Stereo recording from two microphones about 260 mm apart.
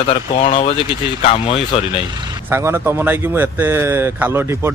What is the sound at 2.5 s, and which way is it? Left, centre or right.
A man's voice, centre.